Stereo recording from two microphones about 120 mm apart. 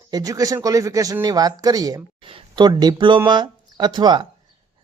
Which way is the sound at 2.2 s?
45° right (ahead or behind).